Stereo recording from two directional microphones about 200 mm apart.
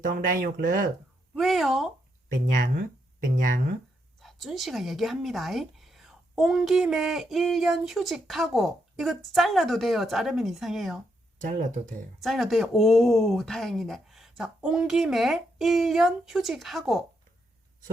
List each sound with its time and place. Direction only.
0.0 s speech: 45° right (ahead or behind)
1.4 s speech: centre (ahead or behind)
3.4 s speech: 45° right (ahead or behind)
4.2 s speech: centre (ahead or behind)
11.3 s speech: 40° right (ahead or behind)
12.2 s speech: centre (ahead or behind)